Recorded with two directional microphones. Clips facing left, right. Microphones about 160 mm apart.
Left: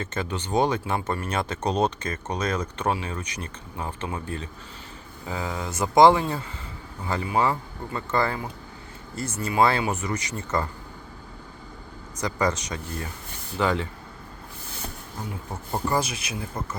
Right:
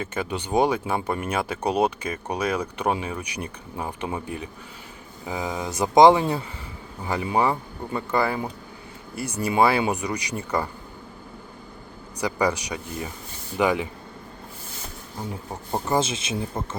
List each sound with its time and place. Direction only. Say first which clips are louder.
0.0 s speech: right 2 dB; 10° right (ahead or behind)
12.1 s speech: right 2 dB; 10° right (ahead or behind)
15.3 s speech: right 2 dB; 20° right (ahead or behind)